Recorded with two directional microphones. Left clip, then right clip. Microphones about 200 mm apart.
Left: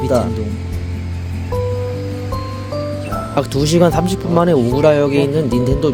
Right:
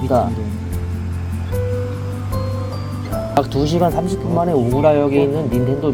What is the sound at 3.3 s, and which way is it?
Speech, 60° left (ahead or behind).